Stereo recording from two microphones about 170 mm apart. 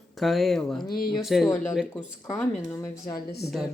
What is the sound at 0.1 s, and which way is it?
Speech, centre (ahead or behind).